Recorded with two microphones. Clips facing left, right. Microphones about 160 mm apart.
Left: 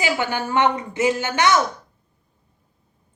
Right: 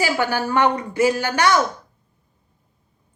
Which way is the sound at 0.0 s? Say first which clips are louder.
Right 2 dB; 20° left (ahead or behind).